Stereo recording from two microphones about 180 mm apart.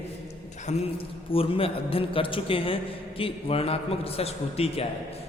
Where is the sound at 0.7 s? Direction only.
40° left (ahead or behind).